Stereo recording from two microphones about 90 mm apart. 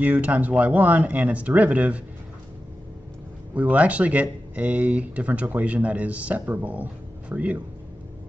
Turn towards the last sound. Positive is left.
turn(degrees=-15)  # may be behind; listen again after turning